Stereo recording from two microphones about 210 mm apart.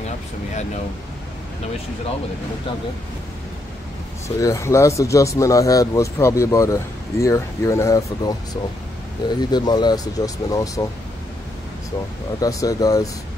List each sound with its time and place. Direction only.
4.4 s speech: 15° left (ahead or behind)
9.4 s speech: 20° left (ahead or behind)
12.4 s speech: 15° left (ahead or behind)